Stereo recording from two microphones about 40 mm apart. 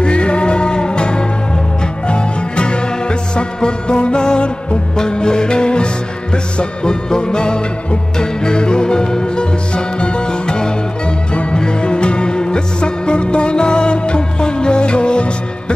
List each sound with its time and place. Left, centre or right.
0.0 s music: left